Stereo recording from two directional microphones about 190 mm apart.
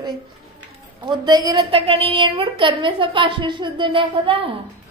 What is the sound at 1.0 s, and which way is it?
A woman's voice, 25° right (ahead or behind).